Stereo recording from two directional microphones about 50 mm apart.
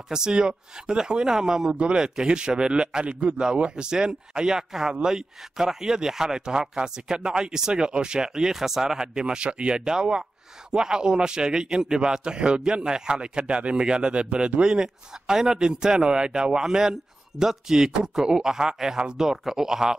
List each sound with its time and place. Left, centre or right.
0.1 s a man's voice: centre